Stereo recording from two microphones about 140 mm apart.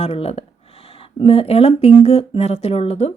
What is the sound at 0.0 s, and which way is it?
A woman's voice, 45° left (ahead or behind).